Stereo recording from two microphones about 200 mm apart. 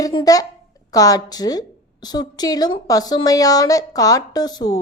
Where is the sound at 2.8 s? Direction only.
20° left (ahead or behind).